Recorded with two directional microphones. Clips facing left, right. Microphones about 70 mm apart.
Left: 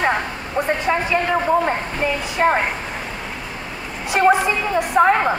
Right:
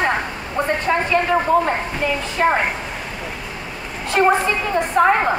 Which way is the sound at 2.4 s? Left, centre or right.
Centre.